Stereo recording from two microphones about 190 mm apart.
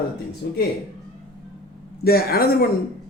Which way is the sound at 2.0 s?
55° left (ahead or behind).